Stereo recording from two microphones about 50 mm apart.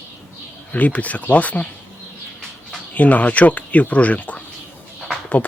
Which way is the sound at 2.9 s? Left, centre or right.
Left.